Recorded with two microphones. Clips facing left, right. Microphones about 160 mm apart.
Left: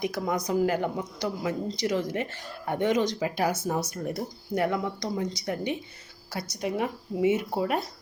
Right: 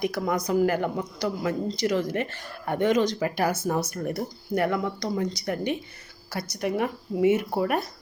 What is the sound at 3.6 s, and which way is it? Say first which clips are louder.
Speech: right 2 dB; 20° left (ahead or behind).